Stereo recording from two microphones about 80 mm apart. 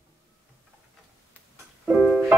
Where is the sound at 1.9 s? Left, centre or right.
Centre.